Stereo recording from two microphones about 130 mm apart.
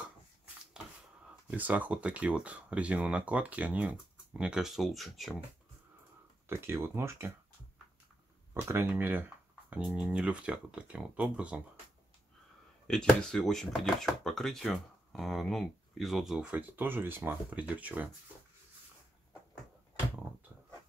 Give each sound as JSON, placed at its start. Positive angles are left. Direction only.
{"t": 1.5, "sound": "speech", "side_deg": -10}
{"t": 6.4, "sound": "speech", "side_deg": -20}
{"t": 8.5, "sound": "speech", "side_deg": -20}
{"t": 12.8, "sound": "speech", "side_deg": 5}